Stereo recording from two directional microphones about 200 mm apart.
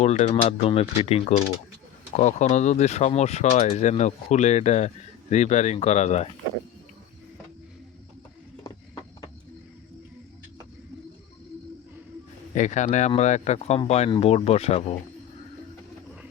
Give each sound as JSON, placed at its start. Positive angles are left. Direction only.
{"t": 0.0, "sound": "speech", "side_deg": 35}
{"t": 12.5, "sound": "speech", "side_deg": 35}